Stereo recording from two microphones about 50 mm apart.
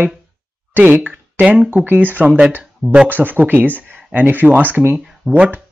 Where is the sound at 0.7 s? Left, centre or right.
Right.